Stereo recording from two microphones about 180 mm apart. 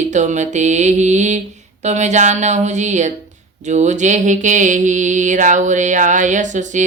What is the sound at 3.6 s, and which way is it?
Mantra, 40° right (ahead or behind).